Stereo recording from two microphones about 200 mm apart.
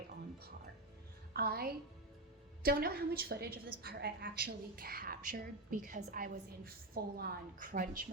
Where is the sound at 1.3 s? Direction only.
50° right (ahead or behind).